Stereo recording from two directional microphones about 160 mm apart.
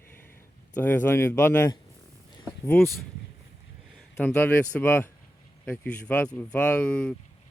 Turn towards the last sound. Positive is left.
turn(degrees=10)  # may be behind; listen again after turning